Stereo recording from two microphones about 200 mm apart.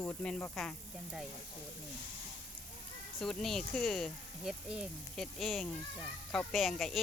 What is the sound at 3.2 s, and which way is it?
Speech, centre (ahead or behind).